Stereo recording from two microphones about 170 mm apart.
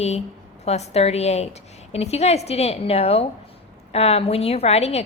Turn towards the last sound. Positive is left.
turn(degrees=40)  # may be behind; listen again after turning